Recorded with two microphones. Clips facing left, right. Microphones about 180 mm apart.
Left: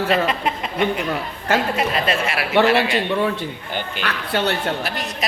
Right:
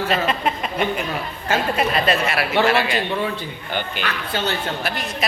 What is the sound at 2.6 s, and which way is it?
A woman's voice, 35° left (ahead or behind).